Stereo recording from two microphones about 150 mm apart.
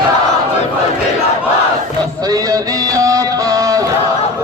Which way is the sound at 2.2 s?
25° right (ahead or behind).